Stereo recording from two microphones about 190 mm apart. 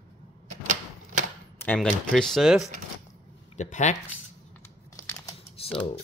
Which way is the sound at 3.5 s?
40° left (ahead or behind).